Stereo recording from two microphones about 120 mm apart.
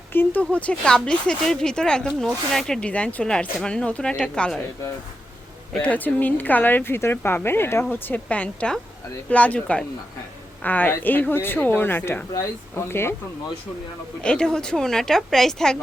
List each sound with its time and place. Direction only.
0.1 s speech: 15° left (ahead or behind)
5.8 s speech: 15° left (ahead or behind)
14.2 s a woman's voice: 5° left (ahead or behind)